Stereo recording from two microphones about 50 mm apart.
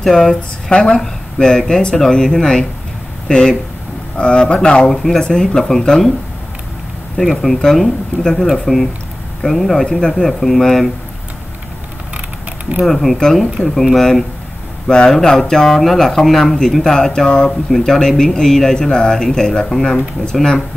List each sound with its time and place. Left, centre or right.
0.0 s a man's voice: centre
7.2 s speech: centre
12.8 s speech: centre